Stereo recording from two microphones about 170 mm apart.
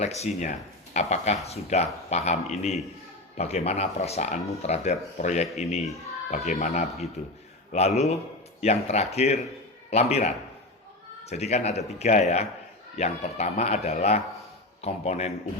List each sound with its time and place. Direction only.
0.0 s speech: 40° left (ahead or behind)